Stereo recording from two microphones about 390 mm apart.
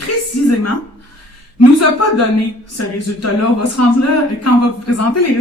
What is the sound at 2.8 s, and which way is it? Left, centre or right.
Speech, left.